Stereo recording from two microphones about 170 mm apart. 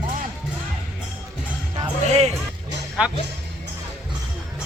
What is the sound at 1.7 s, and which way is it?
Music, 40° right (ahead or behind).